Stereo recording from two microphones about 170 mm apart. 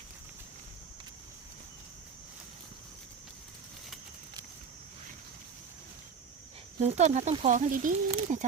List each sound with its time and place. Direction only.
6.8 s speech: 40° right (ahead or behind)